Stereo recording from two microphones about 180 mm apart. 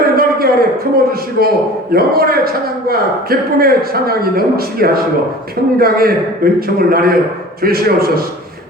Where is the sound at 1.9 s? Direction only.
55° right (ahead or behind).